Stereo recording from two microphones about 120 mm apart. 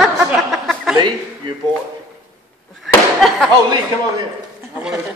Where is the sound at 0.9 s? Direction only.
40° right (ahead or behind).